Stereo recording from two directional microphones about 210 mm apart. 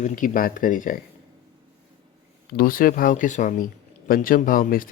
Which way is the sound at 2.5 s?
40° left (ahead or behind).